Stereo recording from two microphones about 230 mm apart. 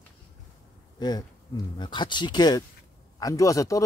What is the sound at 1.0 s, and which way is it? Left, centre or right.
Speech, centre.